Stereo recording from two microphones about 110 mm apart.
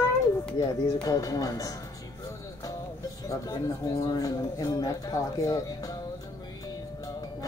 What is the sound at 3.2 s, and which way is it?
Speech, 30° left (ahead or behind).